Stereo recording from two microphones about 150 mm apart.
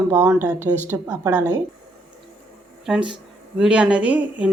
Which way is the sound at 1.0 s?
15° right (ahead or behind).